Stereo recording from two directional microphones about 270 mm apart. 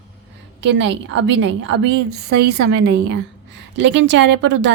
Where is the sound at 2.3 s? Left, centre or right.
Right.